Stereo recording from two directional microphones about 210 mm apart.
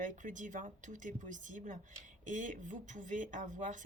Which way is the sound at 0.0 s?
40° right (ahead or behind).